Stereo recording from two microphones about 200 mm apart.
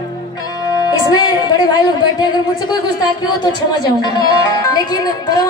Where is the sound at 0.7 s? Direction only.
20° left (ahead or behind).